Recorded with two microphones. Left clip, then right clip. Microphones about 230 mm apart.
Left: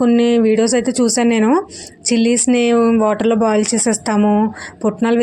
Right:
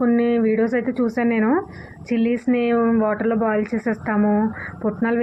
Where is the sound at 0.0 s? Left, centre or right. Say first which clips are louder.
Left 5 dB; left.